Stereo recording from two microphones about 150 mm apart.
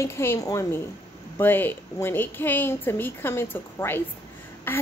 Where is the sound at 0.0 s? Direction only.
15° left (ahead or behind).